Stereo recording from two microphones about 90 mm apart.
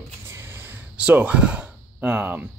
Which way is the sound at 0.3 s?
30° right (ahead or behind).